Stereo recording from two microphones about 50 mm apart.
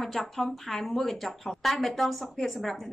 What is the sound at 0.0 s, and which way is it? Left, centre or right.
A woman's voice, centre.